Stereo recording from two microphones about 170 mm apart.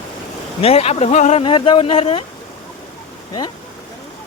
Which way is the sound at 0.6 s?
35° left (ahead or behind).